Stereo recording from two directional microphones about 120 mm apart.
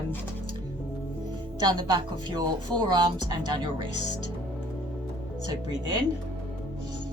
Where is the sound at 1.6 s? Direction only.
35° right (ahead or behind).